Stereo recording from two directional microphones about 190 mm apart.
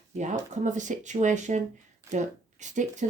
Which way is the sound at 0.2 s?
40° right (ahead or behind).